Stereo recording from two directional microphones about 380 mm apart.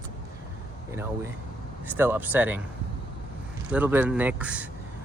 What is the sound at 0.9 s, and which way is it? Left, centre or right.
Speech, centre.